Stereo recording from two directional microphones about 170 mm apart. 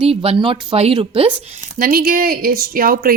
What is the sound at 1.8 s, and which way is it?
A woman's voice, 55° right (ahead or behind).